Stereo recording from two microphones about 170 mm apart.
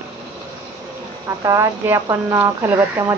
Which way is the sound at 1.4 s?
15° right (ahead or behind).